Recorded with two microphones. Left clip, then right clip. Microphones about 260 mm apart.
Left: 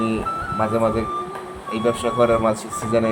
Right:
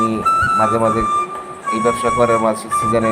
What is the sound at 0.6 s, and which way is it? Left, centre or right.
Speech, centre.